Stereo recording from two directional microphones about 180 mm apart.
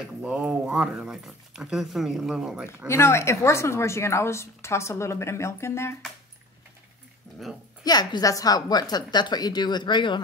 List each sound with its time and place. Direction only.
0.2 s speech: 5° right (ahead or behind)
2.9 s a woman's voice: 15° left (ahead or behind)
7.8 s a woman's voice: 20° left (ahead or behind)